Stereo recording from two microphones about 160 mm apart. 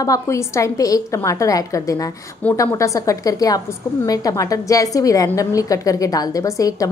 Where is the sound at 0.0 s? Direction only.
20° left (ahead or behind).